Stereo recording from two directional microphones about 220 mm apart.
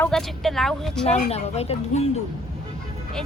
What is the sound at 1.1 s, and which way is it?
Speech, 30° left (ahead or behind).